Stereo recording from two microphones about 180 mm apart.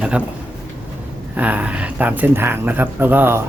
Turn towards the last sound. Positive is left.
turn(degrees=-10)  # may be behind; listen again after turning